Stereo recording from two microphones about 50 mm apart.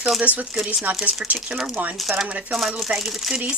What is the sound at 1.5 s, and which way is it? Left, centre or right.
Speech, centre.